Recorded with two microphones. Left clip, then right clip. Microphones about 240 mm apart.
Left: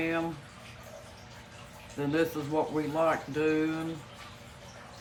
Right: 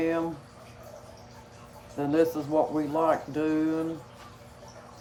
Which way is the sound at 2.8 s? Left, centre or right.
Centre.